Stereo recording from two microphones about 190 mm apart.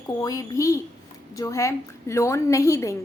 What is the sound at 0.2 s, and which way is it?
A woman's voice, 15° left (ahead or behind).